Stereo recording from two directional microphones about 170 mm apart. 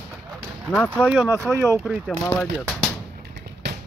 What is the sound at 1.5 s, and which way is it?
Speech, 15° right (ahead or behind).